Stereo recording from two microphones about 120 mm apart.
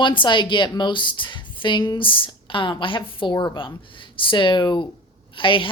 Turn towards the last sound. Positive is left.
turn(degrees=45)  # may be behind; listen again after turning